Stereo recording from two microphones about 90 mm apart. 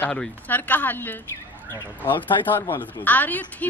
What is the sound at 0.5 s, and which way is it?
Speech, 20° left (ahead or behind).